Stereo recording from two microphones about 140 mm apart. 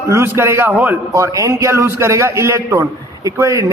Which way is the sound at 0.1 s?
20° right (ahead or behind).